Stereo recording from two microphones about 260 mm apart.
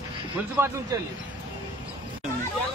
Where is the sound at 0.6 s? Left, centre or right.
Centre.